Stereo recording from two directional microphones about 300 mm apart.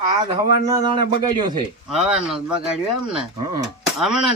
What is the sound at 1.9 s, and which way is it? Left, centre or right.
A man's voice, centre.